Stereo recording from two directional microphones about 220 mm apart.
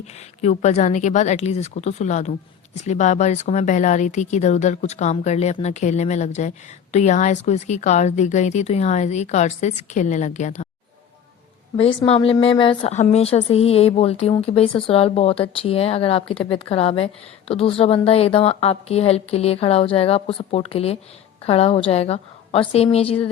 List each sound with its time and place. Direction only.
0.0 s a woman's voice: 30° left (ahead or behind)
11.8 s a woman's voice: 25° left (ahead or behind)